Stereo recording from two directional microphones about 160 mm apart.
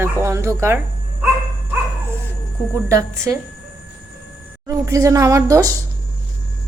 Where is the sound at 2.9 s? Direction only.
20° right (ahead or behind).